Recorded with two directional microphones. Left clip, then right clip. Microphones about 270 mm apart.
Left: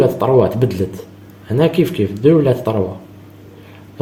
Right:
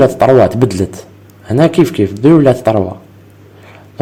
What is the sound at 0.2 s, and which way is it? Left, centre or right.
Speech, right.